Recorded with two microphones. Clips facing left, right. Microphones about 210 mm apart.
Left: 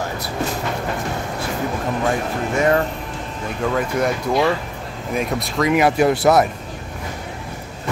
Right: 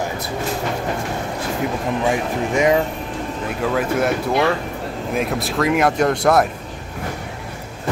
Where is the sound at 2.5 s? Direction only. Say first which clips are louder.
Right 1 dB; 10° right (ahead or behind).